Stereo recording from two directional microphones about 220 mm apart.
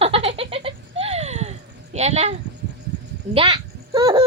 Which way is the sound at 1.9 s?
30° right (ahead or behind).